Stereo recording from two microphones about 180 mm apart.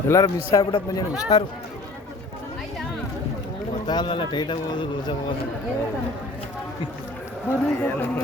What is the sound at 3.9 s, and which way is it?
Speech, 25° left (ahead or behind).